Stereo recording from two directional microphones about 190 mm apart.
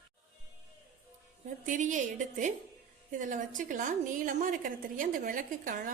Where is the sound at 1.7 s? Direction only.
40° right (ahead or behind).